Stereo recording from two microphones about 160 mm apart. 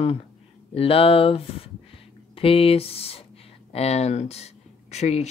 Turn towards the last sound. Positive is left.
turn(degrees=40)  # may be behind; listen again after turning